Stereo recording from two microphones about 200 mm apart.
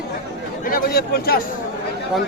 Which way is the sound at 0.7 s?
50° left (ahead or behind).